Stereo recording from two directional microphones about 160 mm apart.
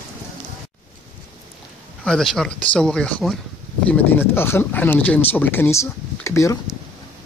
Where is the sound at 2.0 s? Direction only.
5° left (ahead or behind); by 6.6 s 20° left (ahead or behind).